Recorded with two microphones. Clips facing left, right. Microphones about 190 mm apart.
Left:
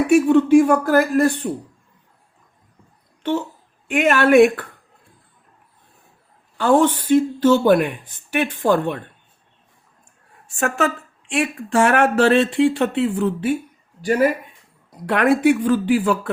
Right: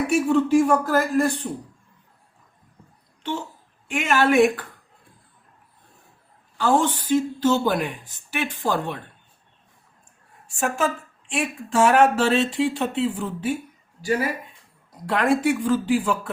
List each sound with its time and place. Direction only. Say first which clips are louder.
0.1 s speech: left 7 dB; 65° left (ahead or behind)
3.8 s speech: left 4 dB; 55° left (ahead or behind)
6.6 s speech: left 5 dB; 55° left (ahead or behind)
10.6 s speech: left 3 dB; 65° left (ahead or behind)